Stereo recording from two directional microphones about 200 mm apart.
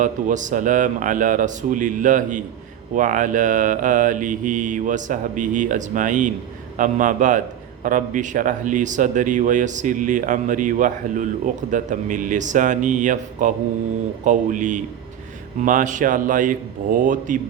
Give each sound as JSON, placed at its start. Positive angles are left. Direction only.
{"t": 0.0, "sound": "speech", "side_deg": -40}